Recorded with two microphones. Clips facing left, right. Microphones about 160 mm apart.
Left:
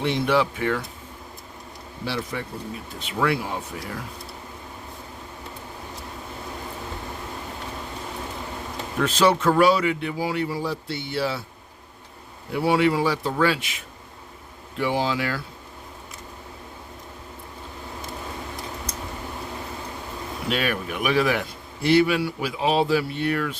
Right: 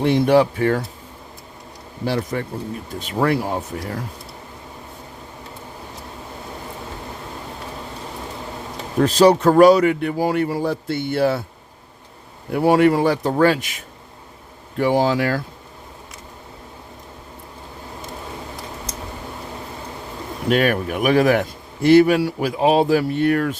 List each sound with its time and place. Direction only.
0.0 s a man's voice: 45° right (ahead or behind)
2.0 s a man's voice: 45° right (ahead or behind)
9.0 s a man's voice: 40° right (ahead or behind)
12.5 s a man's voice: 50° right (ahead or behind)
20.5 s a man's voice: 45° right (ahead or behind)